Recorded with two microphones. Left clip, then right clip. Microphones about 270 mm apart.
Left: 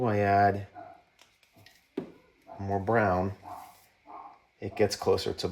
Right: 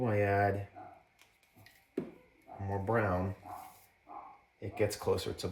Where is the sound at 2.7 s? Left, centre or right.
Left.